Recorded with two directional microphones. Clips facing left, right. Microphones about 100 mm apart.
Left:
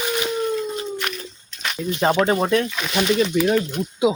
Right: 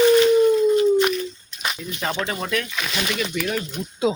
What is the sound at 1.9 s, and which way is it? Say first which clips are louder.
Speech: left 10 dB; 30° left (ahead or behind).